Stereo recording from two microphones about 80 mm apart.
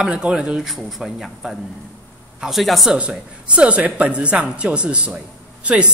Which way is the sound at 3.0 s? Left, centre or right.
Centre.